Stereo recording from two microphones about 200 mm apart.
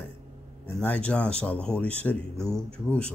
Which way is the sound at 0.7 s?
5° left (ahead or behind).